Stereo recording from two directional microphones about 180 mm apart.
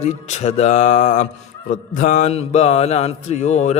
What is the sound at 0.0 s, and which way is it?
Mantra, 40° left (ahead or behind).